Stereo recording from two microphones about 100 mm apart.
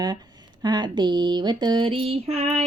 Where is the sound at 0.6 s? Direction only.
45° right (ahead or behind).